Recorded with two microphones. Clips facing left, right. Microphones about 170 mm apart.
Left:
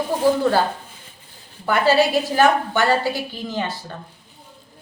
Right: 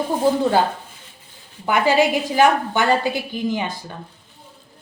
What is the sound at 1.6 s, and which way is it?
A woman's voice, 15° right (ahead or behind).